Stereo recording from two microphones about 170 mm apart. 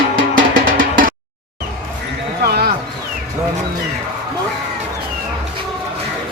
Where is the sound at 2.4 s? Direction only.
65° right (ahead or behind).